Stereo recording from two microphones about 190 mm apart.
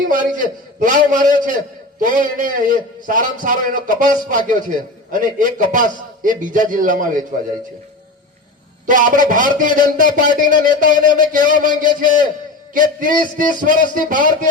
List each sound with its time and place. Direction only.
0.1 s a man's voice: 45° right (ahead or behind)
8.9 s a man's voice: 45° right (ahead or behind)